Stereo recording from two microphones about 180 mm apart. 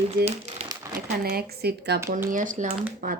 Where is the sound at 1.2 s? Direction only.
60° right (ahead or behind).